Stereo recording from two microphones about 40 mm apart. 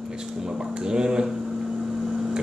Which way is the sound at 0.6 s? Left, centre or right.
Centre.